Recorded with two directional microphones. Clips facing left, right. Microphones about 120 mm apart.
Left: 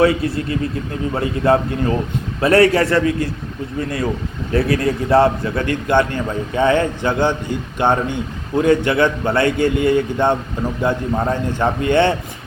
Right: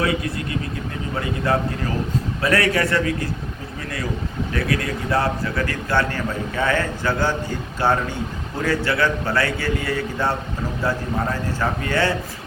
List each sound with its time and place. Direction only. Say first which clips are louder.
0.0 s a man's voice: left 7 dB; 30° left (ahead or behind)
1.5 s a man's voice: left 7 dB; 25° left (ahead or behind)